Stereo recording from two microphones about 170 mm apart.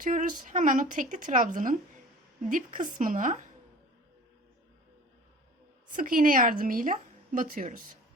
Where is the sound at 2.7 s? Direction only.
50° right (ahead or behind).